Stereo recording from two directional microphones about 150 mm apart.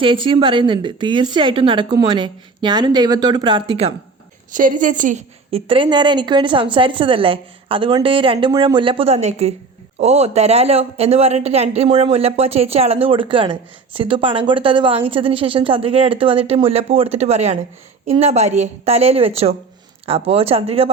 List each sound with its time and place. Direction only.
0.0 s speech: 35° right (ahead or behind)
4.5 s a woman's voice: 60° right (ahead or behind)
5.5 s a woman's voice: 40° right (ahead or behind)